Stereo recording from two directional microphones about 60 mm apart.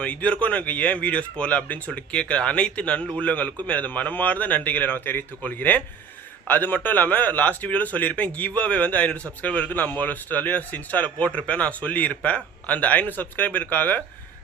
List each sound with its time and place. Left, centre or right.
0.0 s speech: left